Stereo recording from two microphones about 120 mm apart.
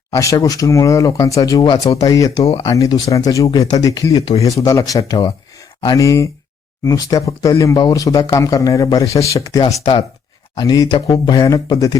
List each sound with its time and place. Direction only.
0.1 s speech: 30° left (ahead or behind)
10.6 s speech: 35° left (ahead or behind)
11.4 s speech: 30° left (ahead or behind)